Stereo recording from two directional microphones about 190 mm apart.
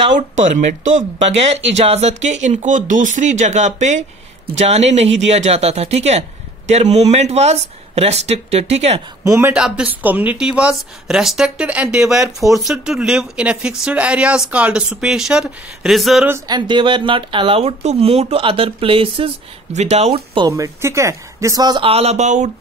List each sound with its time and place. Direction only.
0.1 s speech: 40° right (ahead or behind)
9.2 s a man's voice: 15° right (ahead or behind)
9.5 s speech: 5° right (ahead or behind)
16.3 s speech: 20° right (ahead or behind); by 22.5 s 40° right (ahead or behind)